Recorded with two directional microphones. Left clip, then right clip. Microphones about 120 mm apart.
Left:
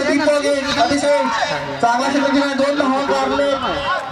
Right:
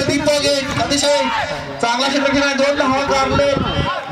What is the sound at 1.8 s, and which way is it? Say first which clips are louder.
A man's voice: even; 15° right (ahead or behind).